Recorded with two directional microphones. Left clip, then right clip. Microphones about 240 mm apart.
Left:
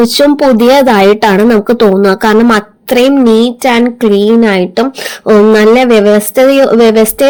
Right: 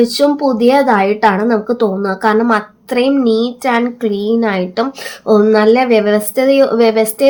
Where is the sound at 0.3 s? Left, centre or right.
Left.